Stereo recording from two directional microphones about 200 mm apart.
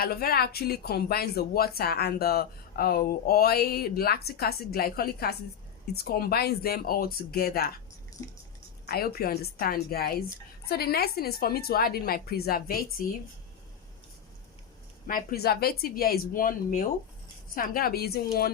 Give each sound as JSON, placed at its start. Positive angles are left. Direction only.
{"t": 0.0, "sound": "speech", "side_deg": 50}
{"t": 8.9, "sound": "speech", "side_deg": 50}
{"t": 15.0, "sound": "speech", "side_deg": 45}